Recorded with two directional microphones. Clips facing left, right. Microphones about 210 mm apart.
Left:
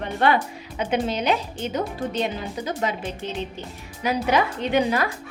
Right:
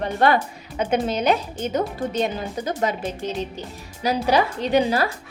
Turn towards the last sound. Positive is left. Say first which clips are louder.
# right 2 dB
turn(degrees=-35)  # may be behind; listen again after turning